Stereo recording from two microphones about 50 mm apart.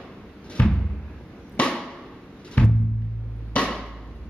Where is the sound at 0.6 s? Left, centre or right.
Left.